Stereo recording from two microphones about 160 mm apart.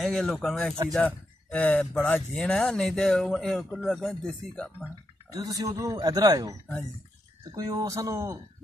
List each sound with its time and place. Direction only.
0.0 s speech: centre (ahead or behind)
5.3 s speech: 20° right (ahead or behind)
7.5 s speech: 20° right (ahead or behind)